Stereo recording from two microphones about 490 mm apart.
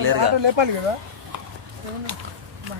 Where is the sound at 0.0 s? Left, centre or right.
Right.